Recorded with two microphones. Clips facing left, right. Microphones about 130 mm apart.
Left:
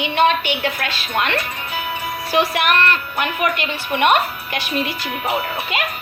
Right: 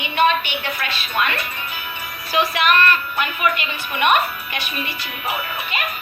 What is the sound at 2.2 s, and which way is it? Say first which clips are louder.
A woman's voice: left 1 dB; 60° left (ahead or behind).